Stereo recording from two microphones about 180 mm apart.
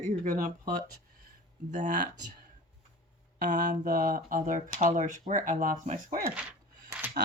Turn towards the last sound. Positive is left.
turn(degrees=-10)  # may be behind; listen again after turning